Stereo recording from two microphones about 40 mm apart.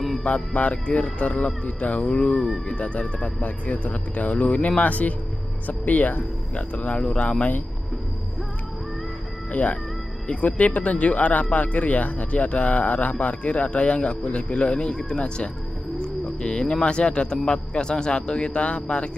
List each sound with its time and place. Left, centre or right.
0.2 s speech: left
2.0 s speech: centre
2.7 s speech: left
6.5 s speech: left
9.5 s speech: left